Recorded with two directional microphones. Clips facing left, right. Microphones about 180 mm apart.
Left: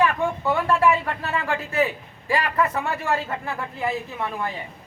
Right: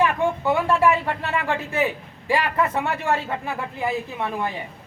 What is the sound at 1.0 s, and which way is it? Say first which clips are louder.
Speech: right 2 dB; 20° right (ahead or behind).